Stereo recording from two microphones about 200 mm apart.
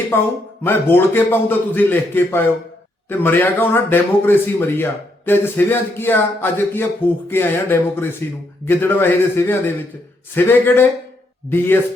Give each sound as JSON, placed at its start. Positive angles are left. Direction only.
{"t": 0.1, "sound": "speech", "side_deg": 10}